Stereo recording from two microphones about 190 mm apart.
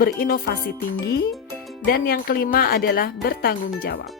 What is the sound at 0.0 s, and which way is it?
Speech, 50° left (ahead or behind).